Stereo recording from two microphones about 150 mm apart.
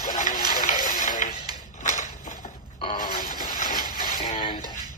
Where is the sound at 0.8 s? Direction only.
60° left (ahead or behind).